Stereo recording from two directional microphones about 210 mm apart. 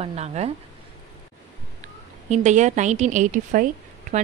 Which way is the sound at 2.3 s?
35° right (ahead or behind).